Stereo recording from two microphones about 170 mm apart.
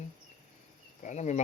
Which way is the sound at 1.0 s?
45° left (ahead or behind).